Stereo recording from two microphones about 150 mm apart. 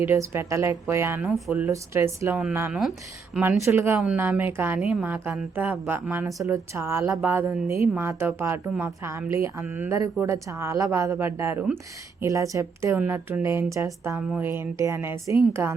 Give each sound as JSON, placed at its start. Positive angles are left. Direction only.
{"t": 0.0, "sound": "speech", "side_deg": -15}
{"t": 1.7, "sound": "a woman's voice", "side_deg": -20}
{"t": 3.6, "sound": "a woman's voice", "side_deg": -15}